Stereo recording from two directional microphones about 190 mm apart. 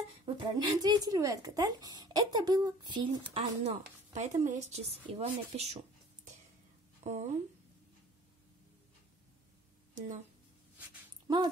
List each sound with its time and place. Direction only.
0.0 s speech: 30° right (ahead or behind)
7.0 s a sound: 35° right (ahead or behind)
9.9 s speech: 40° right (ahead or behind)